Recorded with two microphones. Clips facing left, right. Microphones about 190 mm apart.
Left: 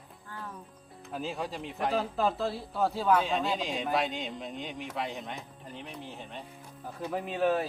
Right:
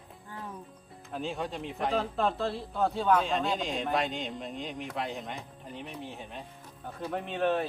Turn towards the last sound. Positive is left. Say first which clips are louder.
# left 1 dB
turn(degrees=5)  # may be behind; listen again after turning